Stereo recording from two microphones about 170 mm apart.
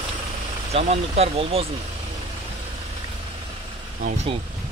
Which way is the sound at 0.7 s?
35° right (ahead or behind).